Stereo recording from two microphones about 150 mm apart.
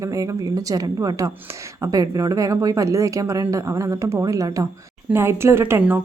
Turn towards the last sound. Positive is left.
turn(degrees=-15)  # may be behind; listen again after turning